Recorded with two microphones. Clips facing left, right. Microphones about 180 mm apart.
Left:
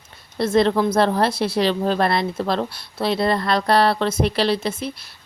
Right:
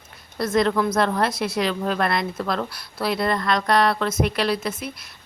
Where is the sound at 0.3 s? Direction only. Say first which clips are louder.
Left 3 dB; 30° left (ahead or behind).